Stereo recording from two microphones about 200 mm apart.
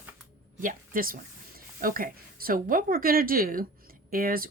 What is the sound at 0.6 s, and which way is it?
Speech, 40° right (ahead or behind).